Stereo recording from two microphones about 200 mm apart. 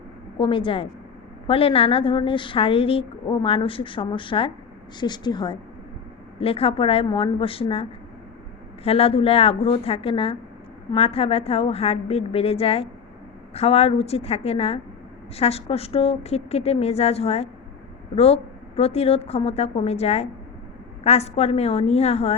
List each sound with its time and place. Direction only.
0.3 s a woman's voice: 25° left (ahead or behind)